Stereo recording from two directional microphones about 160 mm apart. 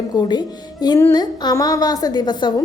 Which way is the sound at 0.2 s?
25° left (ahead or behind).